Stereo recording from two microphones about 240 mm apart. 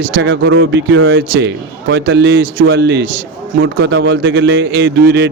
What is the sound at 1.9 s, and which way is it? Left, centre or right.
A man's voice, right.